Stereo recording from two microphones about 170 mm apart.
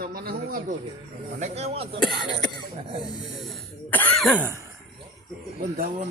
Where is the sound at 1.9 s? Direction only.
25° left (ahead or behind).